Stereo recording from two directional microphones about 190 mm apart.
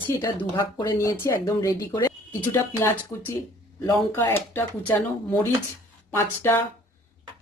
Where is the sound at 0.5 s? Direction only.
20° left (ahead or behind).